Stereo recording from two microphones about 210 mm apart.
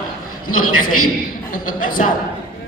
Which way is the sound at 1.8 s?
40° left (ahead or behind).